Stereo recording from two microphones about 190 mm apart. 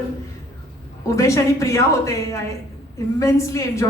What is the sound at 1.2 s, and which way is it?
A woman's voice, 15° left (ahead or behind).